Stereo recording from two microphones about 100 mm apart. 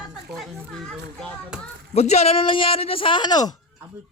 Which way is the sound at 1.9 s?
90° left.